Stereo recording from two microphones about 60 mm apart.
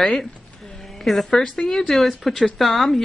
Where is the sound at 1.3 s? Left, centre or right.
Centre.